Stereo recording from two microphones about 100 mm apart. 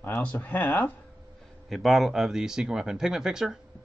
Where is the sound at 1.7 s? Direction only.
Centre (ahead or behind).